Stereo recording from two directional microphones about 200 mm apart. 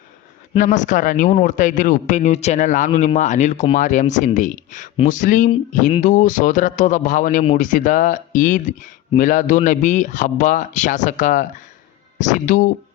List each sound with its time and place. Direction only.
0.5 s speech: 40° left (ahead or behind)